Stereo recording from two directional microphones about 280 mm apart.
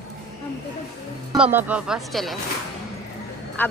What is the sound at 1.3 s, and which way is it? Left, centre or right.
A woman's voice, centre.